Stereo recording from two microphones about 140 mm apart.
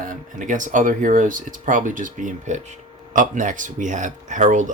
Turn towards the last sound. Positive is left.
turn(degrees=-65)  # may be behind; listen again after turning